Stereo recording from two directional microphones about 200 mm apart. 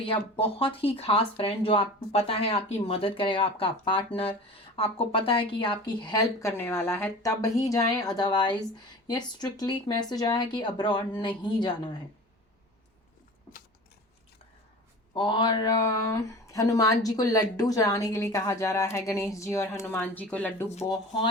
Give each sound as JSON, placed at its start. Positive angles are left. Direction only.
{"t": 0.0, "sound": "speech", "side_deg": 25}
{"t": 15.1, "sound": "a woman's voice", "side_deg": 25}